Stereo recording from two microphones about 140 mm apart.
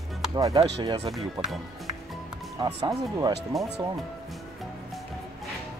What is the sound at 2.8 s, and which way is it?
Speech, 30° right (ahead or behind).